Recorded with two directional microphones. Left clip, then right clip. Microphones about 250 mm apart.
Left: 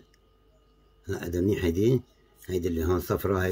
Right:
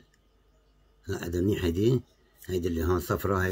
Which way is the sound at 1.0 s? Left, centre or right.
Centre.